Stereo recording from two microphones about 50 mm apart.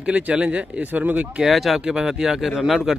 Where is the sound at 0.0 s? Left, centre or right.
Right.